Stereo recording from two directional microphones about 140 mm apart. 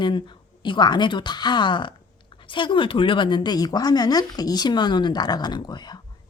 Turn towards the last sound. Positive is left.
turn(degrees=30)  # may be behind; listen again after turning